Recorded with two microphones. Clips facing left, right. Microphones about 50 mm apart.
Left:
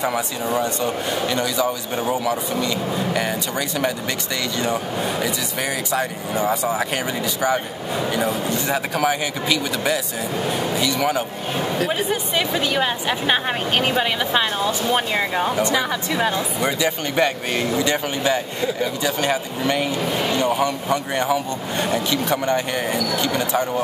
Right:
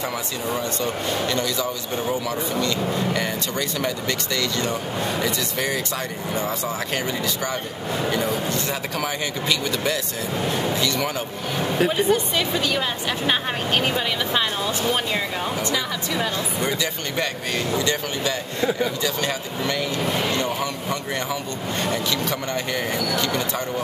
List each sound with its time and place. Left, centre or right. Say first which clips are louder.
0.0 s a man's voice: left 4 dB; centre
5.2 s a man's voice: even; centre
8.1 s a man's voice: left 2 dB; centre